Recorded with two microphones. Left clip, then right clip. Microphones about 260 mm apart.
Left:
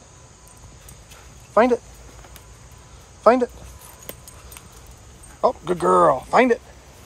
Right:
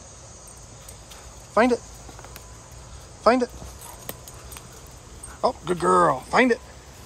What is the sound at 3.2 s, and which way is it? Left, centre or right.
Speech, centre.